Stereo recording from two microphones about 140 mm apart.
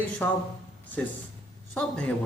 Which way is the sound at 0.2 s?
10° left (ahead or behind).